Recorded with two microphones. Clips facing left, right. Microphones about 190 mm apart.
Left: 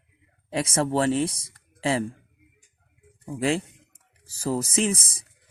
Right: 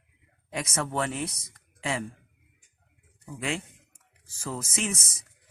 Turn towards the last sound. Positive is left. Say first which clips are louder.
# left 7 dB
turn(degrees=30)  # may be behind; listen again after turning